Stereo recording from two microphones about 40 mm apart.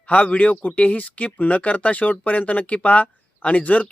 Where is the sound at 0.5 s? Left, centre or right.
Left.